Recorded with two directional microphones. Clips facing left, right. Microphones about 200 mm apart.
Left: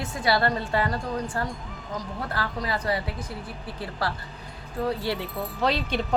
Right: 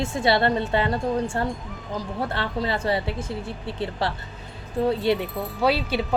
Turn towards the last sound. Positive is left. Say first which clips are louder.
# right 3 dB
turn(degrees=-5)  # may be behind; listen again after turning